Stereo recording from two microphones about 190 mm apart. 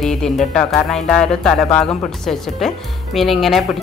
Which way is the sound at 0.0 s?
5° left (ahead or behind).